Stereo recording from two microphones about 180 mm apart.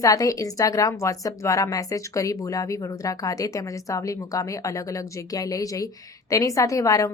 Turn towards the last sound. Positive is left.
turn(degrees=20)  # may be behind; listen again after turning